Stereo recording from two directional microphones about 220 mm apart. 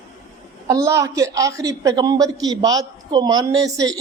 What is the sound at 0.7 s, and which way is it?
A woman's voice, 15° right (ahead or behind).